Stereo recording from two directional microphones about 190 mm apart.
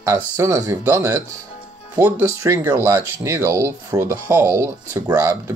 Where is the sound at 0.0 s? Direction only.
15° right (ahead or behind).